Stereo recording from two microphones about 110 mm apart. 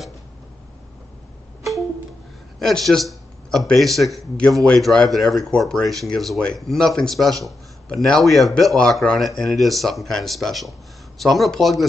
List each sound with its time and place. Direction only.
2.6 s speech: 5° left (ahead or behind)